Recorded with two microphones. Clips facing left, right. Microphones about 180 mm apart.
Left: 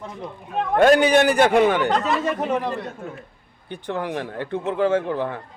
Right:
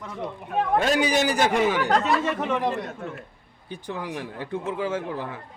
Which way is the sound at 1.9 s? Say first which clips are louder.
Even; centre (ahead or behind).